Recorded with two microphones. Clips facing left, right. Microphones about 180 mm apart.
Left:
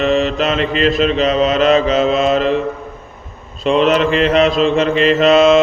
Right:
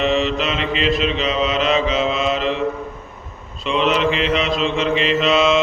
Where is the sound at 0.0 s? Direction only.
45° left (ahead or behind).